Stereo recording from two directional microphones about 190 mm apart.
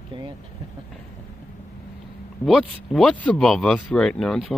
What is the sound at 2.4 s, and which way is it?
Speech, centre (ahead or behind).